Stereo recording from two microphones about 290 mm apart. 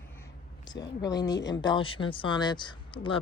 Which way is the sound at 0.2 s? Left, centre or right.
Centre.